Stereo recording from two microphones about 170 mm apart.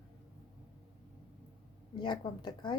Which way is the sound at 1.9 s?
25° left (ahead or behind).